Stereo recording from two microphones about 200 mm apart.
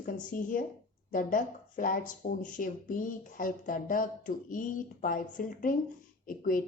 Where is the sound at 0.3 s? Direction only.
40° left (ahead or behind).